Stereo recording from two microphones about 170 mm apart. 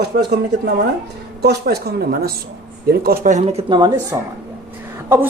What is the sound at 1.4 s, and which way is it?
Speech, 70° right (ahead or behind).